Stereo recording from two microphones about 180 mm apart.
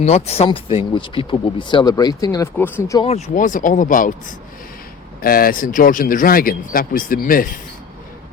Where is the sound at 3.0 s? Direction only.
40° left (ahead or behind).